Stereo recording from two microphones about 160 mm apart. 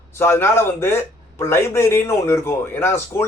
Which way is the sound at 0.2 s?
15° left (ahead or behind).